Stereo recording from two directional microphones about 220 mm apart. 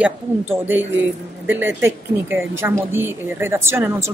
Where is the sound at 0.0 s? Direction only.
10° right (ahead or behind).